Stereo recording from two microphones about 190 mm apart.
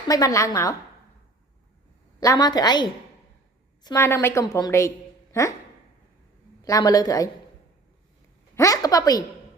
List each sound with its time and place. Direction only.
0.1 s a woman's voice: 15° left (ahead or behind)
2.2 s a woman's voice: 20° left (ahead or behind)
6.6 s a woman's voice: 20° left (ahead or behind)
8.5 s a woman's voice: 20° left (ahead or behind)